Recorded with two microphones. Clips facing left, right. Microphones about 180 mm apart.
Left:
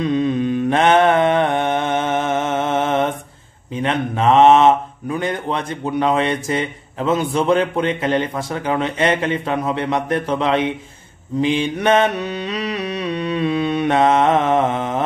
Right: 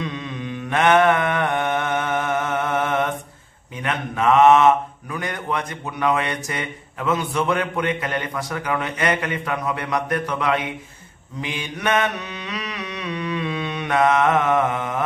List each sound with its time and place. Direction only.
0.0 s mantra: 35° left (ahead or behind)
3.7 s speech: 30° left (ahead or behind)
11.4 s mantra: 30° left (ahead or behind)